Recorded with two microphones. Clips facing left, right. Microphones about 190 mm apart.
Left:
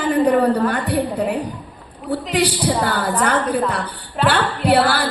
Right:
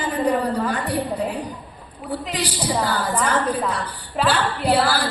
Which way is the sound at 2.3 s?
65° left (ahead or behind).